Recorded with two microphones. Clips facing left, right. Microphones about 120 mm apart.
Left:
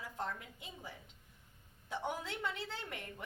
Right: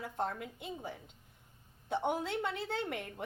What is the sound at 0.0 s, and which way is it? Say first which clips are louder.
A woman's voice: right 5 dB; 55° right (ahead or behind).